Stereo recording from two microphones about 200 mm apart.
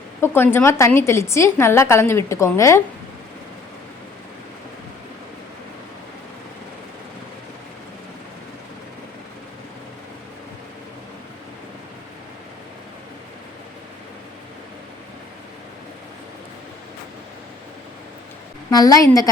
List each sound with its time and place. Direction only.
0.2 s a woman's voice: 10° left (ahead or behind)
18.7 s a woman's voice: 20° left (ahead or behind)